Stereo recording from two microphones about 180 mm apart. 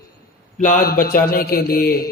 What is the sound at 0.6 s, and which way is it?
Mantra, 45° left (ahead or behind).